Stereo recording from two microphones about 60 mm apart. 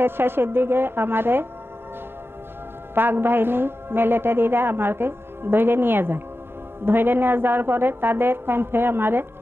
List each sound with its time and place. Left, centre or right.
0.0 s a woman's voice: right
2.9 s a woman's voice: right